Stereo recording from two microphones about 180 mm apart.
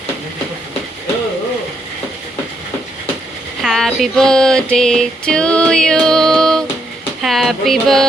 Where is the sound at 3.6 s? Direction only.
Centre (ahead or behind).